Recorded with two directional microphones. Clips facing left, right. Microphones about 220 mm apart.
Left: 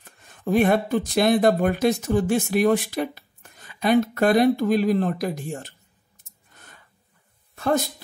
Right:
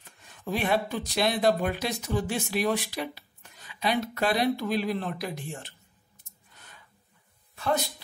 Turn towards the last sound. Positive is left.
turn(degrees=45)  # may be behind; listen again after turning